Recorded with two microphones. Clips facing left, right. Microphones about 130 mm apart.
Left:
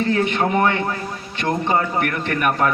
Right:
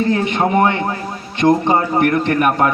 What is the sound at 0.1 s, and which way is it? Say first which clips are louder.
A man's voice: right 3 dB; 40° right (ahead or behind).